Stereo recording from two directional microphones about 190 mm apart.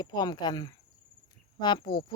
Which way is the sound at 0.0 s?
20° left (ahead or behind).